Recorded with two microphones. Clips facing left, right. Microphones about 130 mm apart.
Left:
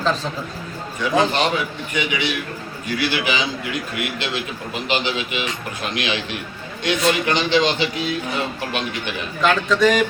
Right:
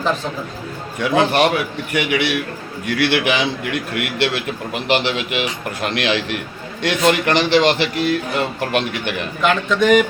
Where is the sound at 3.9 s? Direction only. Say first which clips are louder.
Right 5 dB; 75° right (ahead or behind).